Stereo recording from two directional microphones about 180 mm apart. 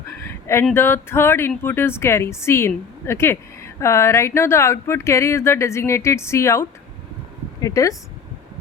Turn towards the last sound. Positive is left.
turn(degrees=20)  # may be behind; listen again after turning